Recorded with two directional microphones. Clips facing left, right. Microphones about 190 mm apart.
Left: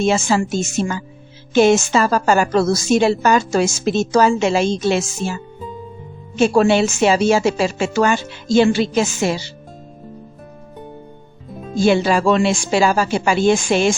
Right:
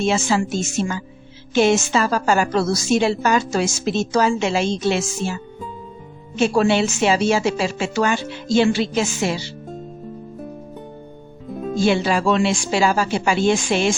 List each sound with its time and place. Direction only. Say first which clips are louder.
0.0 s a woman's voice: left 2 dB; 45° left (ahead or behind)
6.3 s a woman's voice: left 3 dB; 45° left (ahead or behind)
11.9 s a woman's voice: left 4 dB; 45° left (ahead or behind)